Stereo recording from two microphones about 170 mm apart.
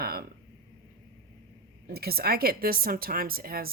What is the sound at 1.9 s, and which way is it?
Speech, 65° right (ahead or behind).